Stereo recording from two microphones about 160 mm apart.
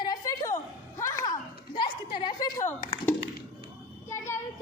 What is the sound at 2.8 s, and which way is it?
Speech, 20° left (ahead or behind).